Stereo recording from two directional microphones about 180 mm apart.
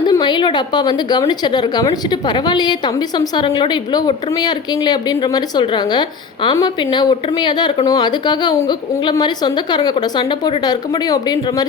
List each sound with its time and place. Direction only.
0.0 s a woman's voice: 25° left (ahead or behind)